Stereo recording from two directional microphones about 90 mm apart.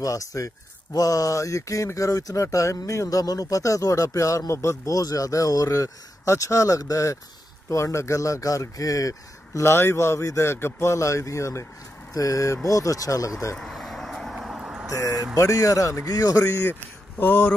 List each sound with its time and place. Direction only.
0.0 s speech: 40° left (ahead or behind)
13.6 s vehicle: 5° left (ahead or behind)
14.9 s speech: 40° left (ahead or behind)
17.2 s speech: 25° left (ahead or behind)